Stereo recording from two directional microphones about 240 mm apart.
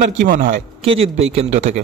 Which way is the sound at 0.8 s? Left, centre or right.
Right.